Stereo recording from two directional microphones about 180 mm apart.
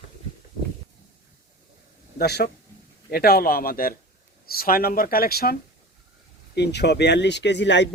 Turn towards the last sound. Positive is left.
turn(degrees=80)